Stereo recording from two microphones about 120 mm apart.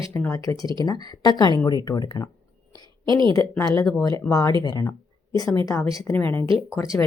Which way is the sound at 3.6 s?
30° left (ahead or behind).